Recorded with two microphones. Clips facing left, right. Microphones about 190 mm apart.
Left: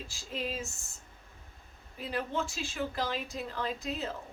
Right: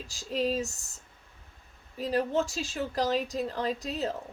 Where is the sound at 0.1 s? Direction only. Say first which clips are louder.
Right 9 dB; 40° right (ahead or behind).